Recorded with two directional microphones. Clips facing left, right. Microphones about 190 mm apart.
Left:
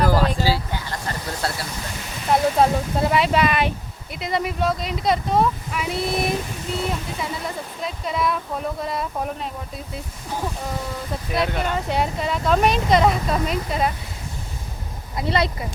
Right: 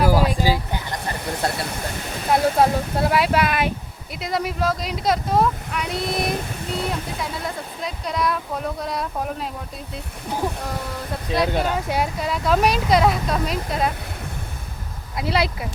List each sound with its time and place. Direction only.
0.0 s a sound: 10° right (ahead or behind)
2.3 s speech: 5° right (ahead or behind)
11.3 s speech: 5° right (ahead or behind)
15.1 s speech: 5° right (ahead or behind)